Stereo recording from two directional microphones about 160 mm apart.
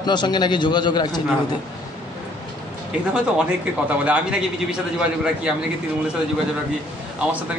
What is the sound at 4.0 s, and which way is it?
A man's voice, 5° right (ahead or behind).